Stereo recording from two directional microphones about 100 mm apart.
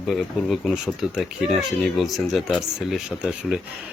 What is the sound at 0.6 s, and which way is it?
Speech, 5° right (ahead or behind).